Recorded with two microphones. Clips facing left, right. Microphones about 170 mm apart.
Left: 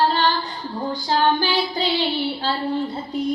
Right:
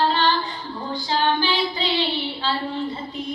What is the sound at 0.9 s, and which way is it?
Child singing, 45° left (ahead or behind).